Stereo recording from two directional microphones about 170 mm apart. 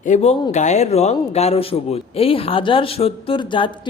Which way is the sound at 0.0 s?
40° left (ahead or behind).